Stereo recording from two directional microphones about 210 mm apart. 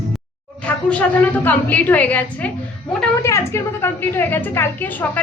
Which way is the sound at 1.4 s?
10° left (ahead or behind).